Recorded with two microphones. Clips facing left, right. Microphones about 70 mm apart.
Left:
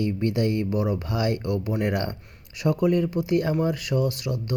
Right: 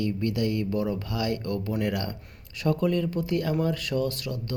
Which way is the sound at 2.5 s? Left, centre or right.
Centre.